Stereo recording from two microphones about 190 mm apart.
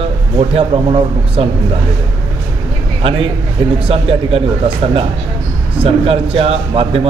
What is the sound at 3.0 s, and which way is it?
A man's voice, 30° right (ahead or behind).